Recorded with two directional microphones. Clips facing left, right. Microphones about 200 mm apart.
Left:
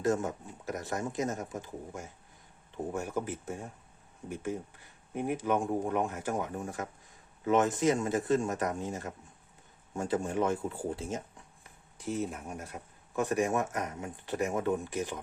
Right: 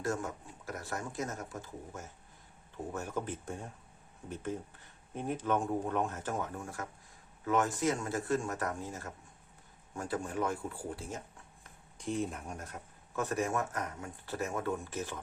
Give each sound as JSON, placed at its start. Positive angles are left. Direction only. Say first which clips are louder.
{"t": 0.0, "sound": "speech", "louder": "left 6 dB", "side_deg": 20}
{"t": 11.6, "sound": "speech", "louder": "left 1 dB", "side_deg": 5}